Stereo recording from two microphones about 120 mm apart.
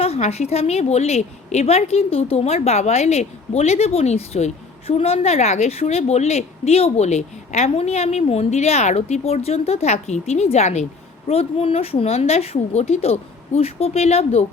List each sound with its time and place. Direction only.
0.0 s a woman's voice: 60° left (ahead or behind)
11.3 s a woman's voice: 55° left (ahead or behind)